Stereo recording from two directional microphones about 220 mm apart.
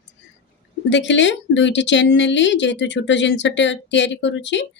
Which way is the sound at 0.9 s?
55° left (ahead or behind).